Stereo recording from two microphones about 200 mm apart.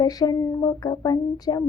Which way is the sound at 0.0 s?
20° left (ahead or behind).